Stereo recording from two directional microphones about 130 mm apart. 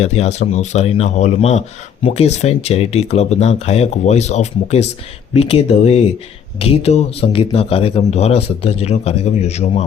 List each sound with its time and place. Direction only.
0.0 s speech: 55° left (ahead or behind)